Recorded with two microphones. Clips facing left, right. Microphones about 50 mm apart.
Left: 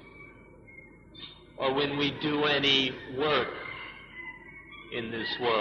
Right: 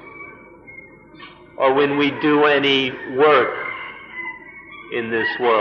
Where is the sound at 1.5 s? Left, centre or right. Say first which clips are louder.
Right 12 dB; right.